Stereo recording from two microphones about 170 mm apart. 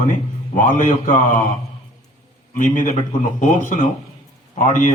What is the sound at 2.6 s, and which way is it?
A man's voice, 50° left (ahead or behind).